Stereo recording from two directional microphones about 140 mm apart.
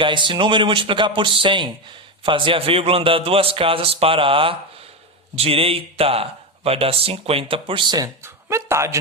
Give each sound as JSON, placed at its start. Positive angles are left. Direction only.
{"t": 0.0, "sound": "speech", "side_deg": -35}